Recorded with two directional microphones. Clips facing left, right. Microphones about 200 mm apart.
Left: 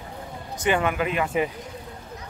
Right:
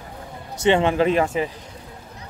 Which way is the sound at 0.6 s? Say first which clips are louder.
Right 6 dB; 25° right (ahead or behind).